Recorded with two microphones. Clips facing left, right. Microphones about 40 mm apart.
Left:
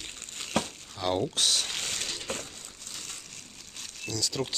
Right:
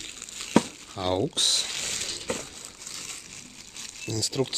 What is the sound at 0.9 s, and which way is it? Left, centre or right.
Speech, centre.